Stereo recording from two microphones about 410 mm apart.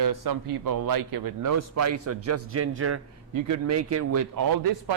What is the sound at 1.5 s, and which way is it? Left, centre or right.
A man's voice, right.